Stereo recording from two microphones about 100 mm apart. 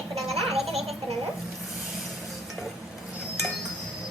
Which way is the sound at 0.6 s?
90° right.